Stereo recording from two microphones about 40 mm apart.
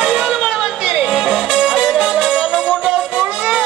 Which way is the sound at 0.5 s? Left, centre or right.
Centre.